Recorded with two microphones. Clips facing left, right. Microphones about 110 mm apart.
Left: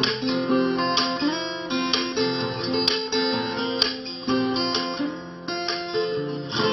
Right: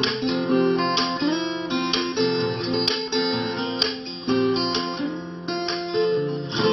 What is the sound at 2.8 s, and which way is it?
Music, 10° left (ahead or behind).